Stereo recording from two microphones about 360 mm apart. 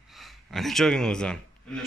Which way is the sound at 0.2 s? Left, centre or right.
Centre.